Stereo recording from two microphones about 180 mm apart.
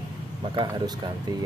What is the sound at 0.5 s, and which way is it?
Speech, 25° right (ahead or behind).